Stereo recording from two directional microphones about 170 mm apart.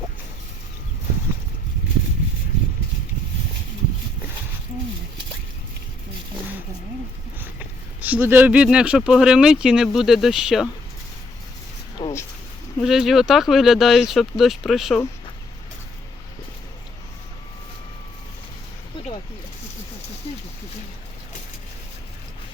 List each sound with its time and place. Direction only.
8.0 s speech: 10° right (ahead or behind)
12.0 s a sound: 20° left (ahead or behind)
12.8 s speech: centre (ahead or behind)